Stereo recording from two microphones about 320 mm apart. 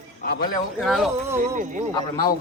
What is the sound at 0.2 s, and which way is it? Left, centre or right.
Speech, left.